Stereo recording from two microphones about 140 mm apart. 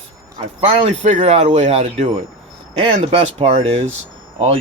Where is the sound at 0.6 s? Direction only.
45° right (ahead or behind).